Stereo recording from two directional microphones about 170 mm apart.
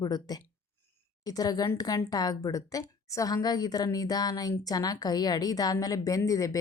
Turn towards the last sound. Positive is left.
turn(degrees=20)  # may be behind; listen again after turning